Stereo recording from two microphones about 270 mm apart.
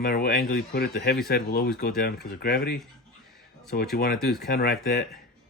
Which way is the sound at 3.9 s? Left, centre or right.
Left.